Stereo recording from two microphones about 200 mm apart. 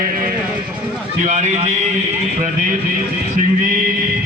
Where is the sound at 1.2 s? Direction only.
35° right (ahead or behind).